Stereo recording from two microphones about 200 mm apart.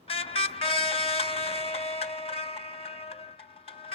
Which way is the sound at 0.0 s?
30° left (ahead or behind).